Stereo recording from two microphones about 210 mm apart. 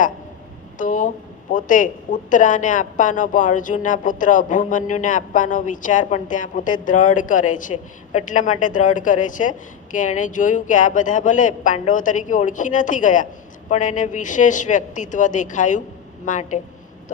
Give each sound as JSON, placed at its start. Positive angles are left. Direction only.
{"t": 0.8, "sound": "a man's voice", "side_deg": 40}